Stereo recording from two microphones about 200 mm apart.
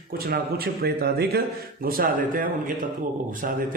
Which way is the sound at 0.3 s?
50° right (ahead or behind).